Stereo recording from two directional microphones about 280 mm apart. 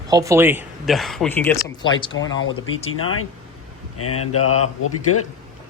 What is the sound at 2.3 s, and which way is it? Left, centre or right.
Speech, left.